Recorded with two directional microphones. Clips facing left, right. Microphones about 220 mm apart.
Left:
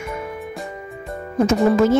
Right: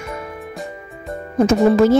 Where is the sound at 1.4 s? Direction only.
35° right (ahead or behind).